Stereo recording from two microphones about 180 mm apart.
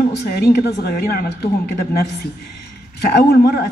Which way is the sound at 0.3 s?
60° left (ahead or behind).